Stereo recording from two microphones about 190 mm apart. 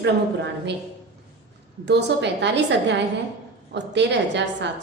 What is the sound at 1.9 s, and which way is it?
Speech, 65° right (ahead or behind).